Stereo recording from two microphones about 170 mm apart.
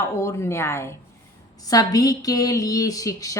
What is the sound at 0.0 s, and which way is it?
A woman's voice, 15° left (ahead or behind).